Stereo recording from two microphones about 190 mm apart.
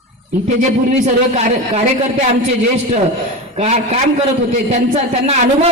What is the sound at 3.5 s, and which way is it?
Speech, 35° right (ahead or behind).